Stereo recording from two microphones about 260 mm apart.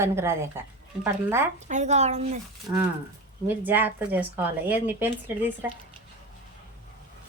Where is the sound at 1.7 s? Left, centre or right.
Right.